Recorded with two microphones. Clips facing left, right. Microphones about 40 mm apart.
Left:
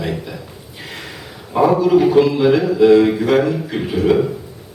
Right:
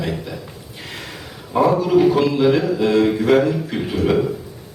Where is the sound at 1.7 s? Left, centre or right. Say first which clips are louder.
Left 4 dB; centre.